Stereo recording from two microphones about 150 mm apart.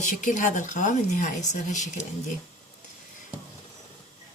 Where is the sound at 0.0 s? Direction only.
55° left (ahead or behind).